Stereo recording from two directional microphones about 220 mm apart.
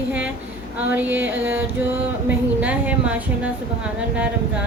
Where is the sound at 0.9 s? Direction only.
10° right (ahead or behind).